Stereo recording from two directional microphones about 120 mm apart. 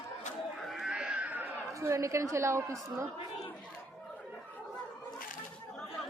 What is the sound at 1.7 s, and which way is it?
A woman's voice, 25° right (ahead or behind).